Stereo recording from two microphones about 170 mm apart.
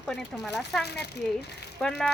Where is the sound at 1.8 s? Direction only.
5° left (ahead or behind).